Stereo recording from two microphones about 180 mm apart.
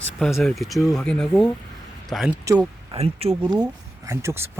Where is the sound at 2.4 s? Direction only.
15° right (ahead or behind).